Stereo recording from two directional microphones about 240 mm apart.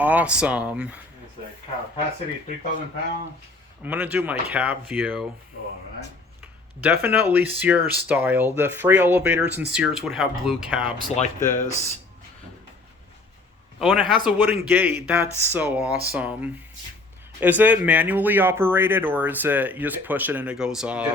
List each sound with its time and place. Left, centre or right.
0.0 s speech: centre
3.8 s speech: centre
6.4 s speech: centre
11.1 s speech: left
13.7 s speech: centre